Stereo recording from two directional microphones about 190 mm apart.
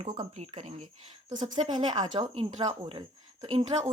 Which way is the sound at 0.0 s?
20° right (ahead or behind).